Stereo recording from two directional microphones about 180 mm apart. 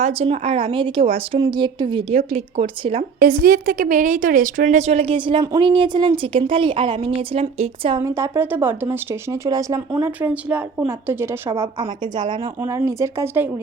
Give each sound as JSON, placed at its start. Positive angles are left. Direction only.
{"t": 0.0, "sound": "speech", "side_deg": -35}
{"t": 3.2, "sound": "a woman's voice", "side_deg": -55}
{"t": 7.9, "sound": "speech", "side_deg": -15}
{"t": 11.8, "sound": "speech", "side_deg": -25}